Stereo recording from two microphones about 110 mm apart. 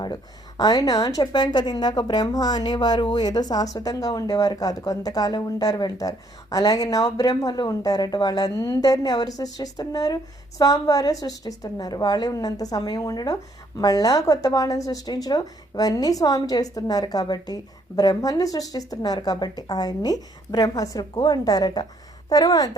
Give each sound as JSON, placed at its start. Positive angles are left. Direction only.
{"t": 0.0, "sound": "a woman's voice", "side_deg": 40}